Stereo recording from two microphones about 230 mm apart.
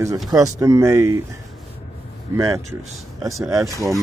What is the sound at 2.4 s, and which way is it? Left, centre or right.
Speech, centre.